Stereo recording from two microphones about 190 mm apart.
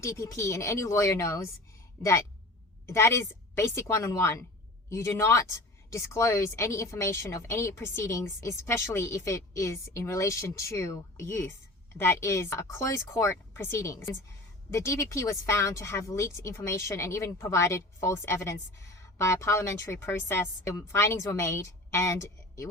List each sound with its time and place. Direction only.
0.0 s a woman's voice: 15° left (ahead or behind)